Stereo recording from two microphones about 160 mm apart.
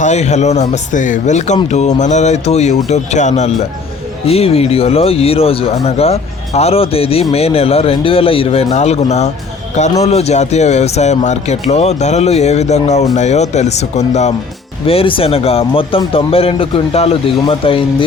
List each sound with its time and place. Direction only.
0.0 s speech: 45° left (ahead or behind)
14.8 s speech: 35° left (ahead or behind)